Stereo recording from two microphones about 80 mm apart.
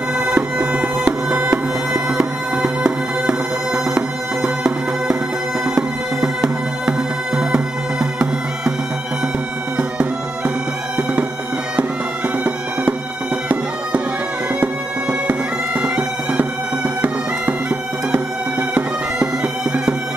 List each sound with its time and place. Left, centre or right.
0.2 s music: centre
9.8 s bagpipes: centre
14.6 s bagpipes: centre